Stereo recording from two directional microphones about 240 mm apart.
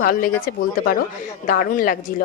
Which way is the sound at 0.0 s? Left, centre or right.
Left.